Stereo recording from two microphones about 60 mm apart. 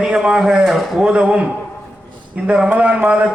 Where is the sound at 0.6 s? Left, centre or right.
Centre.